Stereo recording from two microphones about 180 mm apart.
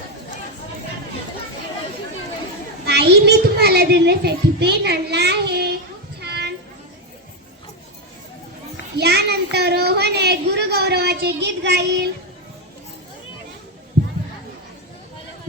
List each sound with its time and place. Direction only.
2.8 s a child's voice: 65° right (ahead or behind)
6.1 s a sound: 65° right (ahead or behind)
9.0 s a child's voice: 65° right (ahead or behind)